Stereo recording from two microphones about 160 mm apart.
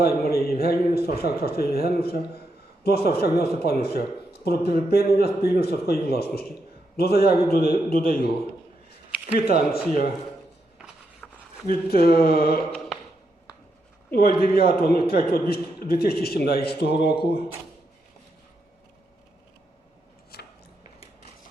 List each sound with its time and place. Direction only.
0.0 s a man's voice: 75° left (ahead or behind)
9.7 s a man's voice: 75° left (ahead or behind)
10.8 s a sound: 5° right (ahead or behind)
11.7 s a man's voice: 75° left (ahead or behind)
14.1 s a man's voice: 75° left (ahead or behind)
20.3 s scissors: 80° left